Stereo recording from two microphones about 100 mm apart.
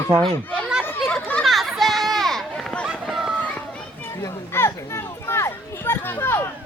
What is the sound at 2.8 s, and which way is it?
Run, 5° right (ahead or behind).